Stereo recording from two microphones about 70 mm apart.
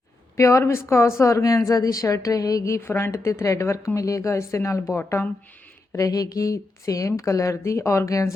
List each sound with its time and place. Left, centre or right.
0.3 s a woman's voice: left
2.8 s a woman's voice: left
6.0 s a woman's voice: left